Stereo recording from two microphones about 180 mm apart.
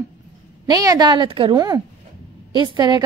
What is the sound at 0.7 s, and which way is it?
A woman's voice, 20° right (ahead or behind).